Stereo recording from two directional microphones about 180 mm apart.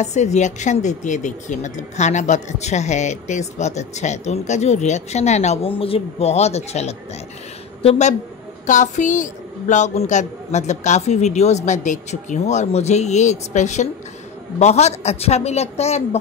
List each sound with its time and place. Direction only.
0.0 s speech: 40° left (ahead or behind)